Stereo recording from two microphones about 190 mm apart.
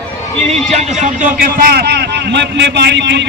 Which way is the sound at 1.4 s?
55° right (ahead or behind).